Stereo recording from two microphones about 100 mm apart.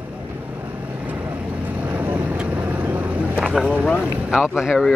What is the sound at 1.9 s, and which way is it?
Vehicle, 15° right (ahead or behind).